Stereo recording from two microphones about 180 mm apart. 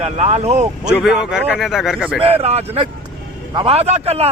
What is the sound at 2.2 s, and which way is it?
Speech, 35° right (ahead or behind).